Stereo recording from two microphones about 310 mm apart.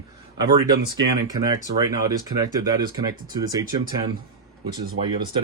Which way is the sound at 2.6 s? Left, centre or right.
Centre.